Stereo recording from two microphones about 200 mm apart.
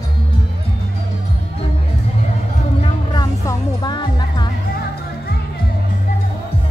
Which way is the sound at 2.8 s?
20° left (ahead or behind).